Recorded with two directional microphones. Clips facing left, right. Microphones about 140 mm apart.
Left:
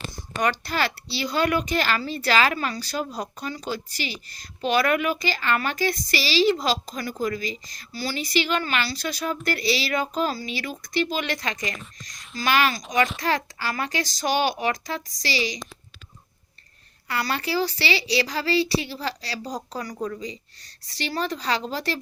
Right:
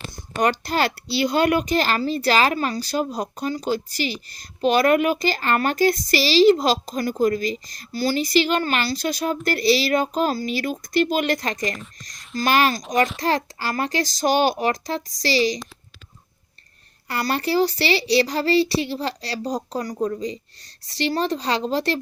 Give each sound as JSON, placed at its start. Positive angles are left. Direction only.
{"t": 0.4, "sound": "speech", "side_deg": -40}
{"t": 17.1, "sound": "speech", "side_deg": -40}
{"t": 18.8, "sound": "speech", "side_deg": -25}
{"t": 19.7, "sound": "speech", "side_deg": -35}